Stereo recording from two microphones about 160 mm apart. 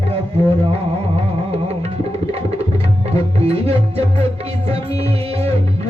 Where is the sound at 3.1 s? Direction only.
40° right (ahead or behind).